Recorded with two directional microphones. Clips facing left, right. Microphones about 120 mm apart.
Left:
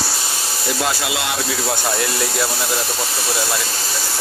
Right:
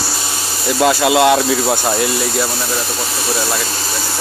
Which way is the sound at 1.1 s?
60° right (ahead or behind).